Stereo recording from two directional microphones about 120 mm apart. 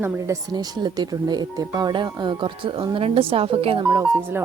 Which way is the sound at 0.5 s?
35° right (ahead or behind).